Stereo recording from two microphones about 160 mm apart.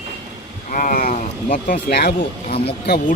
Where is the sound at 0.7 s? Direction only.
60° left (ahead or behind).